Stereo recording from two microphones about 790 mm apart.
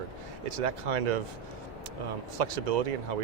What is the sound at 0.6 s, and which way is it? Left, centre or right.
Speech, right.